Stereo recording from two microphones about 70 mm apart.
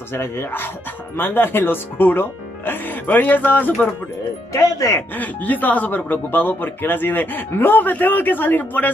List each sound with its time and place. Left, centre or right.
0.1 s speech: left
4.5 s speech: left
5.1 s speech: left